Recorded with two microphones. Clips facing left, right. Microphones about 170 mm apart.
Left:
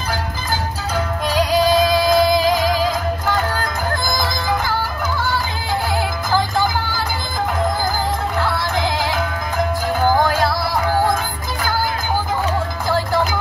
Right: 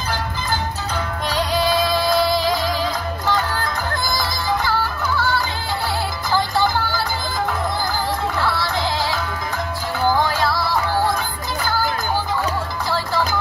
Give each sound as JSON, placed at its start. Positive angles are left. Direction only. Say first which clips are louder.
{"t": 1.6, "sound": "music", "louder": "left 4 dB", "side_deg": 45}
{"t": 2.3, "sound": "music", "louder": "left 4 dB", "side_deg": 10}
{"t": 9.9, "sound": "music", "louder": "left 2 dB", "side_deg": 50}